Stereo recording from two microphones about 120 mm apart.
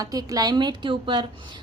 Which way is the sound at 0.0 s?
30° right (ahead or behind).